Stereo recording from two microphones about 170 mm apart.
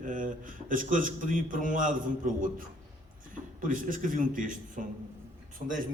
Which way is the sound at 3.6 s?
50° right (ahead or behind).